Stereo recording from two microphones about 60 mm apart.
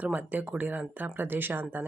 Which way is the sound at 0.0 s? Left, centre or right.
Right.